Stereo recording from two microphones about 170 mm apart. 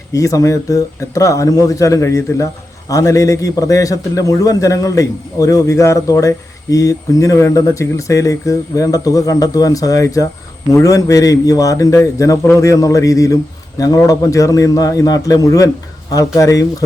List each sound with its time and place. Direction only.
0.1 s a man's voice: 20° left (ahead or behind)